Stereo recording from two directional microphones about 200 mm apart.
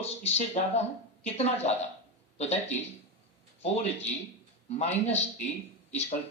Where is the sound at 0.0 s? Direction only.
30° left (ahead or behind).